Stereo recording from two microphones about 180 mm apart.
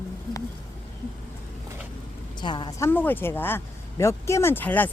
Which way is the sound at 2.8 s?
10° left (ahead or behind).